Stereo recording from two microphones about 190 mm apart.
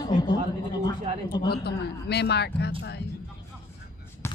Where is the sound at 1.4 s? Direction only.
60° left (ahead or behind).